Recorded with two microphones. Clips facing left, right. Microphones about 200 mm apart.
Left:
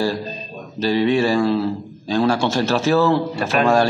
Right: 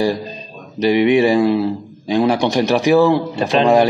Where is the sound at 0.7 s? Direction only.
15° right (ahead or behind).